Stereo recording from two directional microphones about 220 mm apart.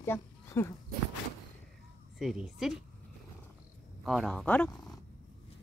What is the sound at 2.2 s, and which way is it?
Speech, centre (ahead or behind).